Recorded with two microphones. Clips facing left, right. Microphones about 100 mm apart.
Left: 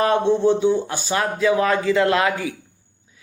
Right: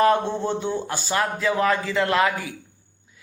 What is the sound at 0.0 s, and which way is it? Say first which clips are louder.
Speech: left 3 dB; 20° left (ahead or behind).